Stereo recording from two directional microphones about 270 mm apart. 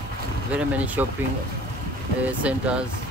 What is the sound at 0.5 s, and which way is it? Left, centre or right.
Speech, centre.